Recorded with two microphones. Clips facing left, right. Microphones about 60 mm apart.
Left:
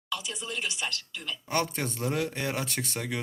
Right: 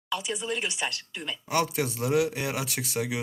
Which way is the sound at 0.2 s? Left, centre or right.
Centre.